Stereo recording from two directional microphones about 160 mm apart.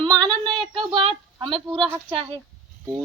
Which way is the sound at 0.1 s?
25° right (ahead or behind).